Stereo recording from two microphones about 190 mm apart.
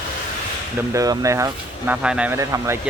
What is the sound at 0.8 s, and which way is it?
Speech, 15° right (ahead or behind).